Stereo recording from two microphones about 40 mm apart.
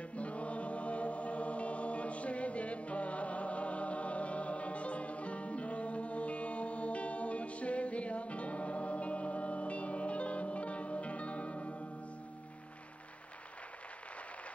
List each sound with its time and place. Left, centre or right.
0.1 s music: left